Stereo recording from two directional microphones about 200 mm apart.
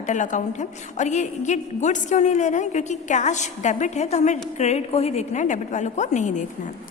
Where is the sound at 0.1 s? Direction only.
40° left (ahead or behind).